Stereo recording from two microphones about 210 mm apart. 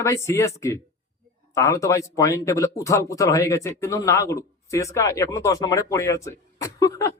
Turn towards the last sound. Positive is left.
turn(degrees=15)  # may be behind; listen again after turning